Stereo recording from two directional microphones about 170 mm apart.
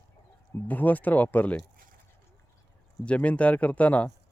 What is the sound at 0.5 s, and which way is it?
Speech, 10° left (ahead or behind).